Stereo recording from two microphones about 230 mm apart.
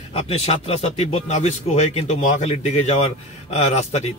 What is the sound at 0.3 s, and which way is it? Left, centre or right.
A man's voice, left.